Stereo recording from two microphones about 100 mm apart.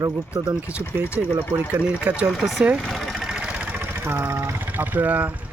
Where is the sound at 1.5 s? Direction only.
15° right (ahead or behind).